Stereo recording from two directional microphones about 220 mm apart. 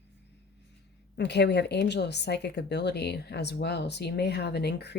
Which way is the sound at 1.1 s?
50° left (ahead or behind).